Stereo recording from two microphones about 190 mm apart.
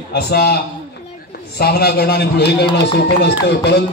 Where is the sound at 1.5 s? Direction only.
55° left (ahead or behind).